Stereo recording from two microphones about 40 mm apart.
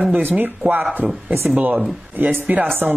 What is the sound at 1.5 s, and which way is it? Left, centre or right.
Speech, right.